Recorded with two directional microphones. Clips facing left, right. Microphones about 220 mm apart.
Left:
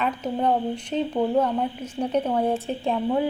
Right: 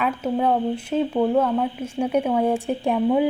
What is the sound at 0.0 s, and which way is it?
A woman's voice, 5° right (ahead or behind).